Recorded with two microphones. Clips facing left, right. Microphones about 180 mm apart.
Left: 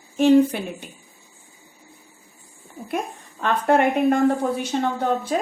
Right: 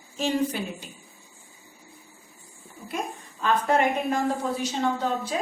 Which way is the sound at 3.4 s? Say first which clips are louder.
Left 4 dB; 60° left (ahead or behind).